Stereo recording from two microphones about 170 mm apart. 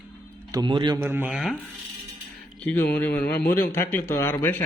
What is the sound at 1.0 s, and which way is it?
Speech, 10° right (ahead or behind).